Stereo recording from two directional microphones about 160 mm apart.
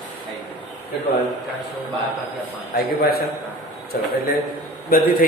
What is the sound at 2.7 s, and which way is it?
Speech, 80° left.